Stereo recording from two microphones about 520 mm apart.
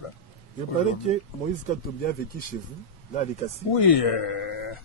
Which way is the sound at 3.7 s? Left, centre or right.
Left.